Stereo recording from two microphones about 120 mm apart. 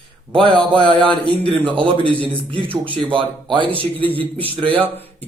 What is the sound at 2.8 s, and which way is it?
A man's voice, 45° right (ahead or behind).